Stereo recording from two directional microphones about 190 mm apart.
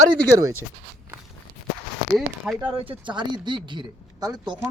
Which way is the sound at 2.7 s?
30° right (ahead or behind).